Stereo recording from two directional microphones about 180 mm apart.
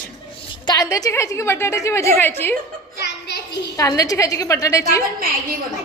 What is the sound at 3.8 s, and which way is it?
A woman's voice, 20° left (ahead or behind).